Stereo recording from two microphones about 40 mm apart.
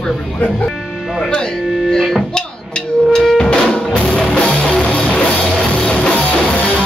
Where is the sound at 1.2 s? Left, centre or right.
Left.